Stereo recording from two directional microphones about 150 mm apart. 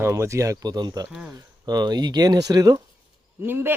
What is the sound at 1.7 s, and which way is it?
Speech, 25° right (ahead or behind).